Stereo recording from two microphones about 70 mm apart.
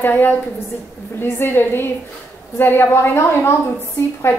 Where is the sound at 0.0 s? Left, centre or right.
Left.